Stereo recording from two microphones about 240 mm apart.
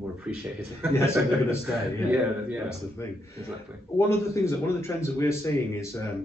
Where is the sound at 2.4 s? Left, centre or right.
Centre.